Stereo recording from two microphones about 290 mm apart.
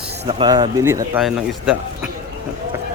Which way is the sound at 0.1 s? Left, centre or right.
Centre.